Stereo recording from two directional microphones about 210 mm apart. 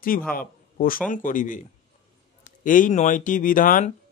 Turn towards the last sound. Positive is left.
turn(degrees=40)  # may be behind; listen again after turning